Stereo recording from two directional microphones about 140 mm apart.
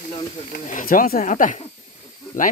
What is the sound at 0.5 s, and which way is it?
Speech, 80° left.